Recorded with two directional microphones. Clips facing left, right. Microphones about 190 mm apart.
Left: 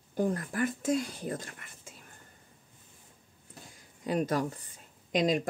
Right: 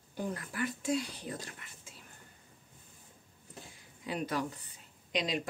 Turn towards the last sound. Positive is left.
turn(degrees=45)  # may be behind; listen again after turning